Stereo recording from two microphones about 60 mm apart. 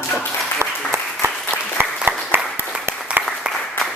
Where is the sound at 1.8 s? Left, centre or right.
Right.